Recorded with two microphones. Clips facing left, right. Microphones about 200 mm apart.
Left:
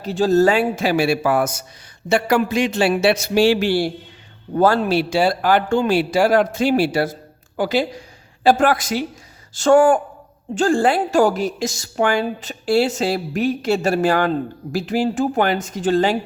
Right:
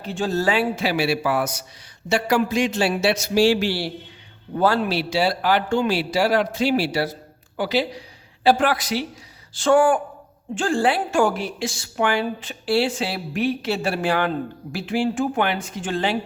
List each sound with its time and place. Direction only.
0.0 s a woman's voice: 40° left (ahead or behind)